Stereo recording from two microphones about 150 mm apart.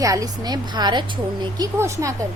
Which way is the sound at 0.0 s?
20° right (ahead or behind).